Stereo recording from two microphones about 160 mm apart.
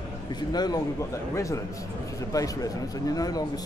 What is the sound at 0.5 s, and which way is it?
Speech, 25° left (ahead or behind).